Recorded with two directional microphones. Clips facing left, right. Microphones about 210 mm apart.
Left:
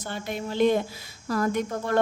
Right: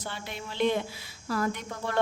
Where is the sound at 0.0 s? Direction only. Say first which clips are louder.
Left 6 dB; 45° left (ahead or behind).